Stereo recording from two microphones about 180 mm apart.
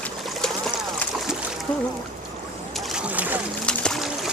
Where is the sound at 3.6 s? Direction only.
5° left (ahead or behind).